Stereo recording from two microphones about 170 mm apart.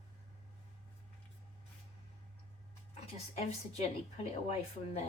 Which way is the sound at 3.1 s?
40° left (ahead or behind).